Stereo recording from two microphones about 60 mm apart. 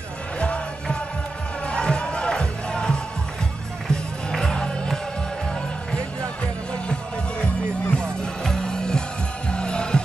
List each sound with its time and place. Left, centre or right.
0.4 s music: centre